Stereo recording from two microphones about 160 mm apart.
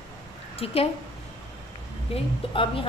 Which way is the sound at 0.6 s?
35° left (ahead or behind).